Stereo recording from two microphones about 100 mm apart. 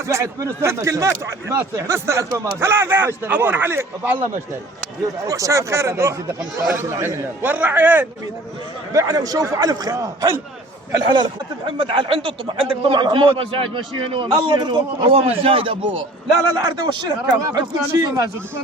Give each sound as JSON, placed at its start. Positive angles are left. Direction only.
{"t": 0.0, "sound": "speech", "side_deg": -30}
{"t": 5.3, "sound": "a man's voice", "side_deg": -30}
{"t": 8.9, "sound": "a man's voice", "side_deg": -35}
{"t": 10.9, "sound": "speech", "side_deg": -50}
{"t": 16.8, "sound": "a man's voice", "side_deg": -40}